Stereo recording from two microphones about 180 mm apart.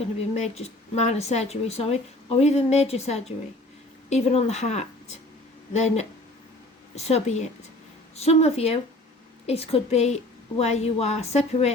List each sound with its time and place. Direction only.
0.0 s speech: 40° left (ahead or behind)